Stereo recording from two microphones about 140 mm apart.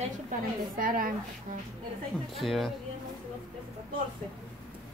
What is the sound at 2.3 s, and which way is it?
Speech, centre (ahead or behind).